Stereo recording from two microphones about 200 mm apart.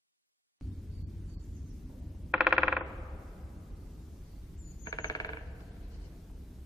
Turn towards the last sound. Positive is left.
turn(degrees=15)  # may be behind; listen again after turning